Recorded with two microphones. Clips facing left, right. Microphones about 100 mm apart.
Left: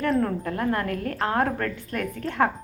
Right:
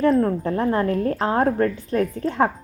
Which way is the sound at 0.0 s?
25° right (ahead or behind).